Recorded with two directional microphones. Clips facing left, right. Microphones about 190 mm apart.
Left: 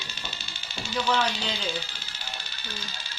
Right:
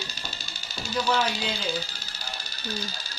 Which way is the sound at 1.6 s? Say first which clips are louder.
Right 2 dB; 40° right (ahead or behind).